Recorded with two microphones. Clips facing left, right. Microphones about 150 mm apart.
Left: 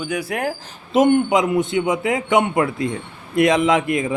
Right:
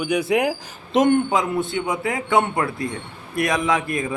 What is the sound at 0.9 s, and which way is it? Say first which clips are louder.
Speech: left 2 dB; 5° left (ahead or behind).